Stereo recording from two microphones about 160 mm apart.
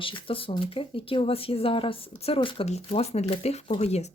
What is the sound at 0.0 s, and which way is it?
Speech, 35° left (ahead or behind).